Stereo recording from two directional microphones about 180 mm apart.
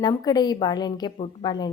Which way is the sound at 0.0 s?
25° left (ahead or behind).